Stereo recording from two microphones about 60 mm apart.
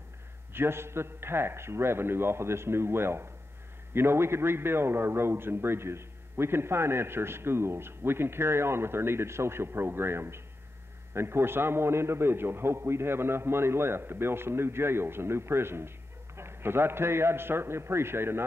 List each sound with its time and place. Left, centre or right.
0.5 s a man's voice: right